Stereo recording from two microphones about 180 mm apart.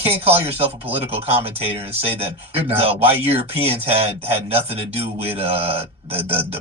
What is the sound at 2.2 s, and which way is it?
Speech, 35° right (ahead or behind).